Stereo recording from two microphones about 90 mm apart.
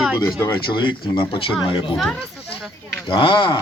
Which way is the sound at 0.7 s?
60° left (ahead or behind).